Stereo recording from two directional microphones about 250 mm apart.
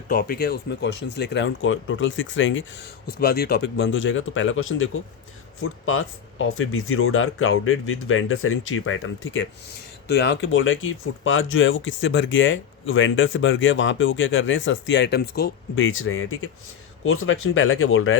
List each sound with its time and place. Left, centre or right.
0.1 s speech: left
15.7 s speech: left